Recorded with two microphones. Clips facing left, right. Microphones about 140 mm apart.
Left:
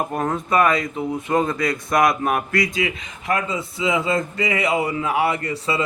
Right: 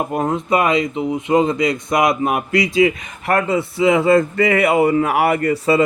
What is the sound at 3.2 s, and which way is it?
Speech, 60° right (ahead or behind).